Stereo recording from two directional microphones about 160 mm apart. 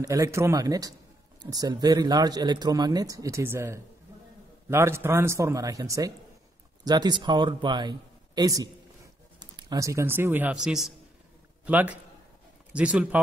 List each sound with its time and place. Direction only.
0.0 s a man's voice: 20° right (ahead or behind)